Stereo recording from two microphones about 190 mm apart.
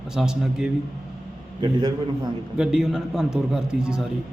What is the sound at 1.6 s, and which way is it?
Speech, 25° right (ahead or behind).